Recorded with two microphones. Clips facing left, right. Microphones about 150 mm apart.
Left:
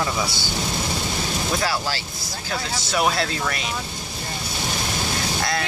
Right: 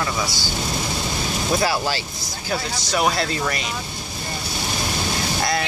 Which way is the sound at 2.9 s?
Centre (ahead or behind).